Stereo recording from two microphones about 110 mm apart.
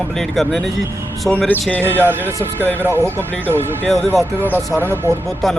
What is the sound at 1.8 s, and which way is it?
Speech, 20° right (ahead or behind).